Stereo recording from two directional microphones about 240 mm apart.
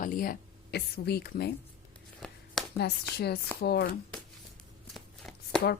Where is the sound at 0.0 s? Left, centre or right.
Left.